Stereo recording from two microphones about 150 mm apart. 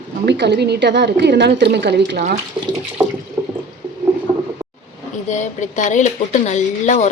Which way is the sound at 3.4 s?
10° right (ahead or behind).